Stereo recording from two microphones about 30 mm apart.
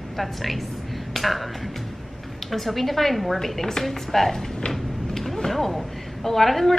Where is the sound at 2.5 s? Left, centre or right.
Centre.